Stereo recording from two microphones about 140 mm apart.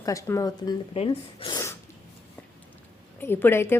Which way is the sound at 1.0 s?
40° left (ahead or behind).